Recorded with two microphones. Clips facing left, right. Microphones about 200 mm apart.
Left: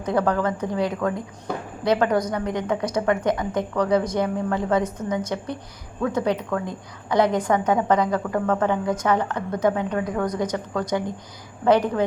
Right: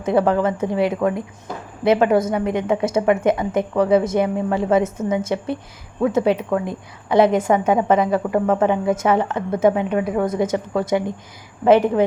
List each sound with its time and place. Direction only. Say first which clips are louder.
0.0 s a woman's voice: right 4 dB; 25° right (ahead or behind)